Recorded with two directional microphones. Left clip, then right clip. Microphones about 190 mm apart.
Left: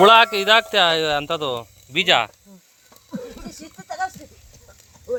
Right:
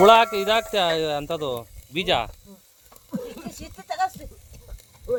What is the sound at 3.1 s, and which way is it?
Snake, 25° right (ahead or behind).